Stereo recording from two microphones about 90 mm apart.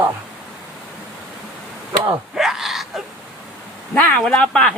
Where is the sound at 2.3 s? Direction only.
5° right (ahead or behind).